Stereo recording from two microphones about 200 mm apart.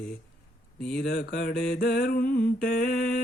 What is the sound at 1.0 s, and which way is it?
Mantra, 55° left (ahead or behind).